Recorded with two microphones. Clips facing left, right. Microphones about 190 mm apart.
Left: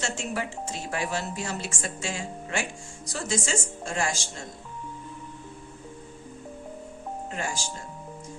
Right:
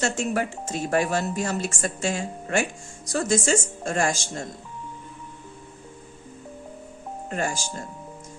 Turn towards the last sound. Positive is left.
turn(degrees=-45)  # may be behind; listen again after turning